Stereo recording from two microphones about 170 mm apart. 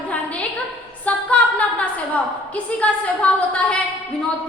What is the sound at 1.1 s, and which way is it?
A woman's voice, 10° left (ahead or behind).